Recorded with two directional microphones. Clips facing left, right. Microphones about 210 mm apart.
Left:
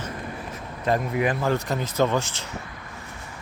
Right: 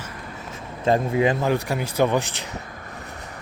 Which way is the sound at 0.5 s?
25° right (ahead or behind).